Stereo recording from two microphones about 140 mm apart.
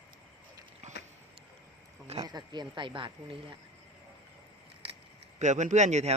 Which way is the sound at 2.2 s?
30° right (ahead or behind).